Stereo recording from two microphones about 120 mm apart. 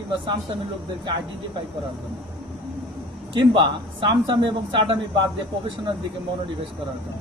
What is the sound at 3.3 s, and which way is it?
A man's voice, 45° right (ahead or behind).